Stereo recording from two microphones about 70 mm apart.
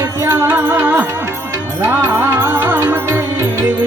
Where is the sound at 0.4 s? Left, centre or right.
Right.